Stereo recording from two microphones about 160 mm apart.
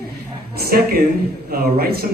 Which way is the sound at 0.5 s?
70° right (ahead or behind).